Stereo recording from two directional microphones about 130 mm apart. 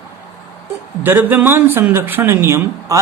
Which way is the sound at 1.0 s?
15° right (ahead or behind).